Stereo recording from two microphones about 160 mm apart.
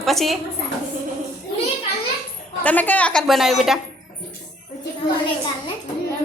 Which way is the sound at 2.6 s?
10° left (ahead or behind).